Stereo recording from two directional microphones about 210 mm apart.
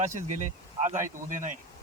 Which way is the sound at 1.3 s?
35° right (ahead or behind).